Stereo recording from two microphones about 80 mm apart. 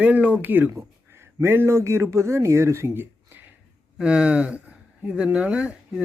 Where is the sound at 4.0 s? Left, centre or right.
Centre.